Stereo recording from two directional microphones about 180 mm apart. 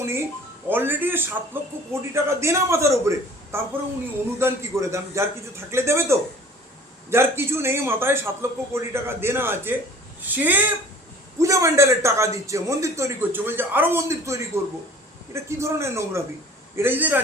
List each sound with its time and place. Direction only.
0.7 s a man's voice: 10° right (ahead or behind)